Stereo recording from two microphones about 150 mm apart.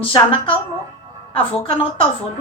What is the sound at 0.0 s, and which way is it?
A woman's voice, 35° left (ahead or behind).